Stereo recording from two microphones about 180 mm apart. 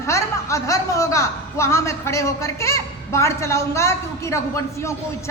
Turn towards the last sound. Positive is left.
turn(degrees=15)  # may be behind; listen again after turning